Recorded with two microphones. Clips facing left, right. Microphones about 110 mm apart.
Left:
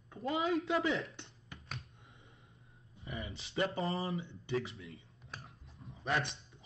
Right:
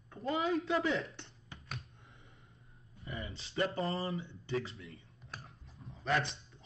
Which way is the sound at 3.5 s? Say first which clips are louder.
Even; 30° left (ahead or behind).